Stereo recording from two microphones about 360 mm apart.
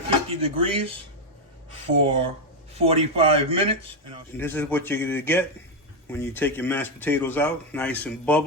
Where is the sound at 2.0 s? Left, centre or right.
Centre.